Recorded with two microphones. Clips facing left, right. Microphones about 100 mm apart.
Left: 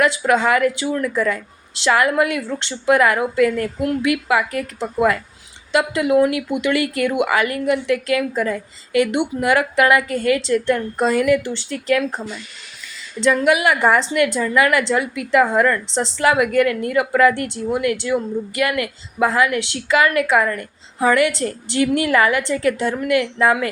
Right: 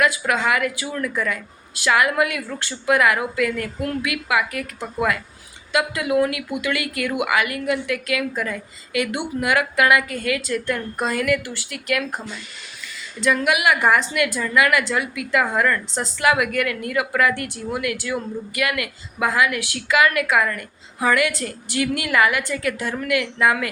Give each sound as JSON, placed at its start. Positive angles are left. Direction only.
{"t": 0.0, "sound": "a woman's voice", "side_deg": 30}